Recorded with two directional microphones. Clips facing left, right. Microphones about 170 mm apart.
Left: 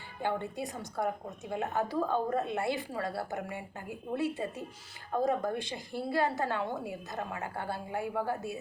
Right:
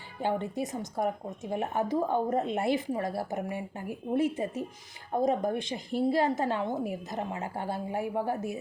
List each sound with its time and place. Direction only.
0.2 s a woman's voice: 20° right (ahead or behind)